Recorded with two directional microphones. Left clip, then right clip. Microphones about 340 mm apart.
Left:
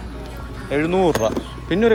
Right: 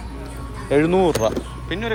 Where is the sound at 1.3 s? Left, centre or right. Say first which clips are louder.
Left 4 dB; centre.